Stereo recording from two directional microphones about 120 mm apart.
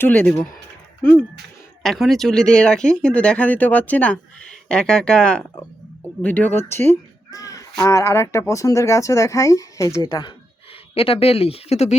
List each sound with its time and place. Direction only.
0.0 s speech: 15° left (ahead or behind)
1.8 s speech: centre (ahead or behind); by 6.9 s 20° left (ahead or behind)
7.3 s speech: 30° left (ahead or behind)
10.1 s speech: 40° left (ahead or behind); by 11.9 s 65° left (ahead or behind)